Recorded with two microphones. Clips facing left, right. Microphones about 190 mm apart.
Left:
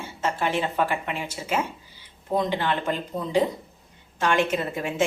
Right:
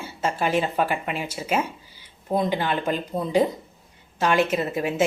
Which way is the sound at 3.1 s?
35° right (ahead or behind).